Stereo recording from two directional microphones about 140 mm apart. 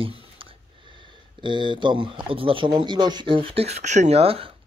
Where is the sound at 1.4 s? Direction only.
35° right (ahead or behind).